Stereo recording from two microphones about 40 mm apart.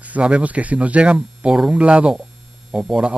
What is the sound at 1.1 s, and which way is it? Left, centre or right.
Speech, right.